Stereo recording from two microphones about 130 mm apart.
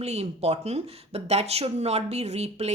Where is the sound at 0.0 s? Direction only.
55° right (ahead or behind).